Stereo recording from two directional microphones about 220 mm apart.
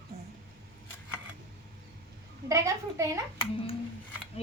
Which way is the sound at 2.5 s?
15° right (ahead or behind).